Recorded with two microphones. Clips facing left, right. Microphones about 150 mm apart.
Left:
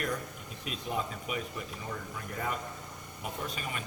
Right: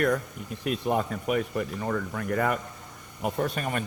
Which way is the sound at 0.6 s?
60° right (ahead or behind).